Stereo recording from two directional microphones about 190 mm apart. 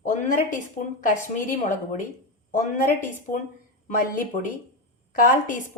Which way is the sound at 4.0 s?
45° left (ahead or behind).